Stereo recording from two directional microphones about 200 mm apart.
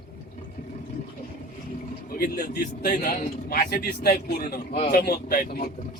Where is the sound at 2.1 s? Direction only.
50° left (ahead or behind).